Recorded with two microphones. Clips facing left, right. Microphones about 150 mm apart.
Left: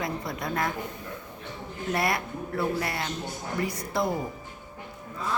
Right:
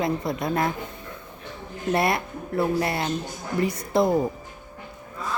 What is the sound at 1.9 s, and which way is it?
A woman's voice, 25° right (ahead or behind).